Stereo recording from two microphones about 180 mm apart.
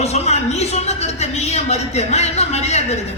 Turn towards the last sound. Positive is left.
turn(degrees=40)  # may be behind; listen again after turning